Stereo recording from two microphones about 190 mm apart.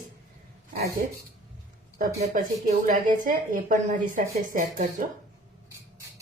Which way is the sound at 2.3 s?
50° right (ahead or behind).